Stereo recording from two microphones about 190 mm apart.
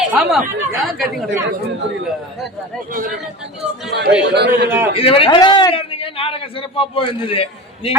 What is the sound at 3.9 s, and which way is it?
Speech, 65° right (ahead or behind).